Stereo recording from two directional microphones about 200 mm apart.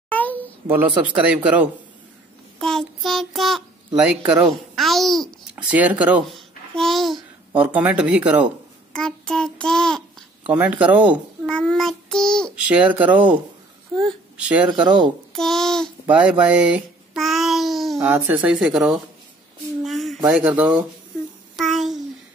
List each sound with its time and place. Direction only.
0.1 s a sound: 10° left (ahead or behind)
0.7 s a child's voice: 10° right (ahead or behind)
4.7 s babbling: centre (ahead or behind)
5.7 s speech: 5° right (ahead or behind)
6.7 s babbling: centre (ahead or behind)
7.6 s speech: 5° right (ahead or behind)
8.9 s child singing: 5° left (ahead or behind)
10.5 s a child's voice: 5° right (ahead or behind)
14.7 s speech: 20° right (ahead or behind)
15.3 s babbling: centre (ahead or behind)
17.9 s speech: 10° right (ahead or behind)
19.8 s a sound: centre (ahead or behind)
20.2 s speech: 5° right (ahead or behind)
21.5 s babbling: centre (ahead or behind)